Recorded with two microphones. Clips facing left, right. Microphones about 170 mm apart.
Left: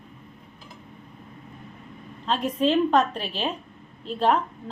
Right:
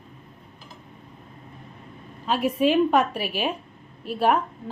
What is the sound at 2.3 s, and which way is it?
A woman's voice, 10° right (ahead or behind).